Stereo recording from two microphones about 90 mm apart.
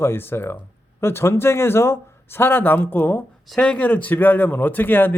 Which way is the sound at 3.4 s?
10° left (ahead or behind).